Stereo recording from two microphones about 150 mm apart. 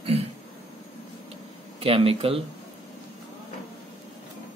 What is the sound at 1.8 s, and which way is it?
Speech, 40° right (ahead or behind).